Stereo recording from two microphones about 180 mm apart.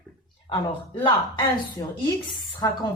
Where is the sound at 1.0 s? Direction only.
25° left (ahead or behind).